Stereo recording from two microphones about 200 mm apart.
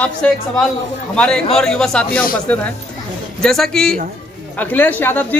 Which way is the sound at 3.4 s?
Centre (ahead or behind).